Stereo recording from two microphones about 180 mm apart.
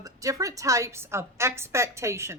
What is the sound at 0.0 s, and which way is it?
A woman's voice, 20° right (ahead or behind).